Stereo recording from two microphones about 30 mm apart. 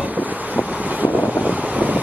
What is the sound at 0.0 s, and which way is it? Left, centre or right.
Wind noise, right.